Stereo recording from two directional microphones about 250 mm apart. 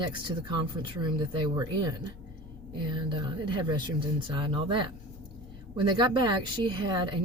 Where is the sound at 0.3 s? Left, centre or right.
Centre.